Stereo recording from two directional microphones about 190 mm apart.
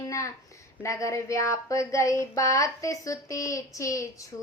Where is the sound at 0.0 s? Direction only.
15° left (ahead or behind).